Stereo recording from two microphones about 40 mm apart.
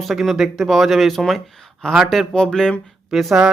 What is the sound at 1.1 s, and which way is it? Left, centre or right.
Speech, centre.